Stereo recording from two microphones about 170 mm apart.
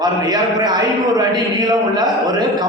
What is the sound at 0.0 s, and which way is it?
A man's voice, 25° right (ahead or behind).